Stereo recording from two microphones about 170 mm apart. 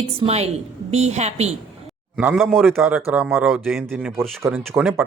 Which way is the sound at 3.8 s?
10° right (ahead or behind).